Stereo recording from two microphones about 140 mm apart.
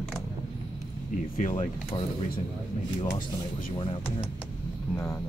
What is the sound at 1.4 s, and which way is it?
Speech, 60° left (ahead or behind).